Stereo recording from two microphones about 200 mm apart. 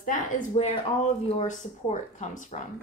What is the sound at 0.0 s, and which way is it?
Speech, 45° left (ahead or behind).